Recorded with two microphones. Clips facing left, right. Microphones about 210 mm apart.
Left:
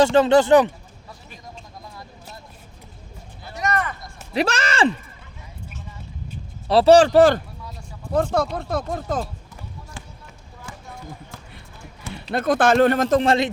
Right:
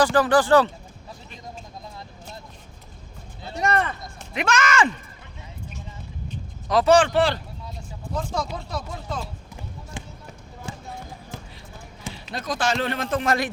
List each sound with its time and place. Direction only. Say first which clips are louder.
0.0 s speech: left 4 dB; 25° left (ahead or behind)
1.8 s vehicle: even; 20° right (ahead or behind)
3.4 s a sound: right 1 dB; 30° right (ahead or behind)
4.4 s speech: left 1 dB; 35° left (ahead or behind)
6.7 s speech: left 5 dB; 35° left (ahead or behind)
8.1 s a man's voice: left 8 dB; 60° left (ahead or behind)
10.0 s basketball bounce: right 5 dB; 15° right (ahead or behind)
12.1 s a man's voice: left 10 dB; 60° left (ahead or behind); by 13.3 s 40° left (ahead or behind)